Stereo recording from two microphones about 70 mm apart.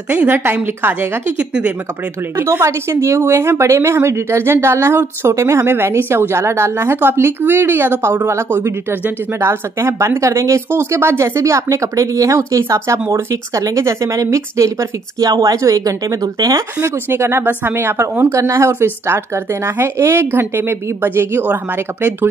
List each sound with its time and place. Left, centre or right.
0.1 s a woman's voice: right
2.4 s a woman's voice: right
16.8 s a woman's voice: right
18.3 s a woman's voice: right